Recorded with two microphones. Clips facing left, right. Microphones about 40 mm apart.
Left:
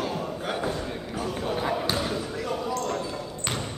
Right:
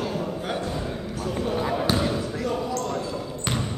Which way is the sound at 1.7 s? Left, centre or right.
Centre.